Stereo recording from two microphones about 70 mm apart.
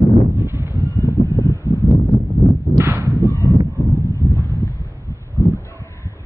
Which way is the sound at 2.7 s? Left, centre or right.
Right.